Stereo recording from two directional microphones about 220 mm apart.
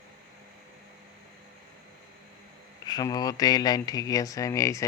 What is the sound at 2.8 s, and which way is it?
Speech, 15° left (ahead or behind).